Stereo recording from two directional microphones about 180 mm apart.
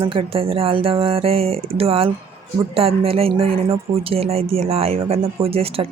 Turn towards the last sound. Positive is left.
turn(degrees=-30)  # may be behind; listen again after turning